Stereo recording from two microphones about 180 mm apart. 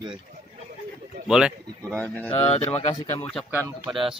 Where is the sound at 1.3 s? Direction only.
Centre (ahead or behind).